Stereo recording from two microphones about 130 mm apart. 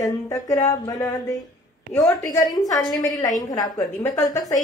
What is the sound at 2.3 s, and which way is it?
A woman's voice, 30° left (ahead or behind).